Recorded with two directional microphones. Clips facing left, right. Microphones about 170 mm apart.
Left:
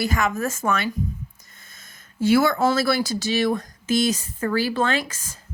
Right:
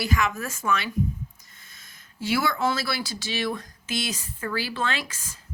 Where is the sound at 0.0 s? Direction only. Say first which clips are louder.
Left 3 dB; 45° left (ahead or behind).